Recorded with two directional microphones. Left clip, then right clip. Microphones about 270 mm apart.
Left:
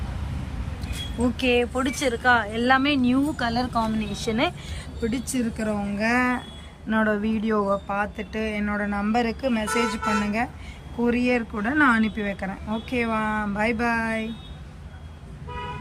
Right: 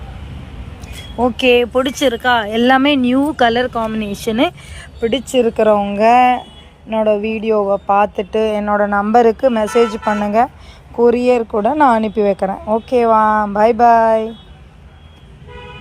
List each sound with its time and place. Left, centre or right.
1.4 s speech: right
3.9 s a woman's voice: right
5.0 s speech: centre
5.5 s speech: right
5.9 s speech: centre
7.5 s speech: centre
7.9 s speech: right
11.1 s speech: centre
11.3 s speech: right